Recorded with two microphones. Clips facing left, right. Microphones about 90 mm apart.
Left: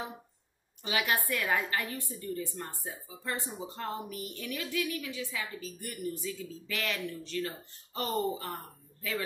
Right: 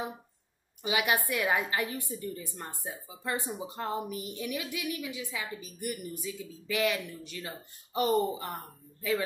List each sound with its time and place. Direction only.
0.8 s speech: 15° right (ahead or behind)